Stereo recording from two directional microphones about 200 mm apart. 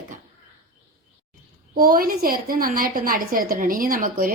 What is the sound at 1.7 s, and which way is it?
A woman's voice, 45° right (ahead or behind).